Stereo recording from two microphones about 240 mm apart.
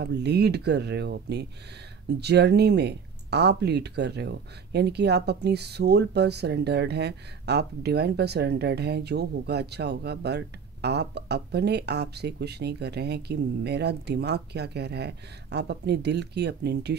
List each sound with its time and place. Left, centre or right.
0.0 s speech: right